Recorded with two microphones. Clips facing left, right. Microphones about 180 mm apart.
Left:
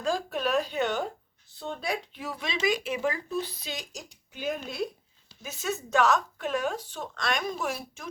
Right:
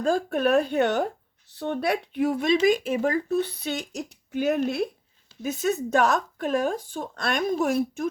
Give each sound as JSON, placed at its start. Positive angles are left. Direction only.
{"t": 0.0, "sound": "speech", "side_deg": -55}
{"t": 5.4, "sound": "speech", "side_deg": -55}